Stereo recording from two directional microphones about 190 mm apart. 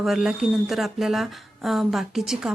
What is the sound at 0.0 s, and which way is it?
Speech, centre (ahead or behind).